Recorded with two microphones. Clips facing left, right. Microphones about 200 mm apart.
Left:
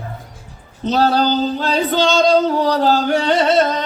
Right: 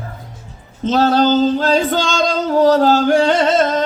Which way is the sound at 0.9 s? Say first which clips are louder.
Right 2 dB; 45° right (ahead or behind).